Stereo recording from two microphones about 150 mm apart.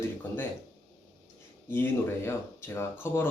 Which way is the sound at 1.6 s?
15° left (ahead or behind).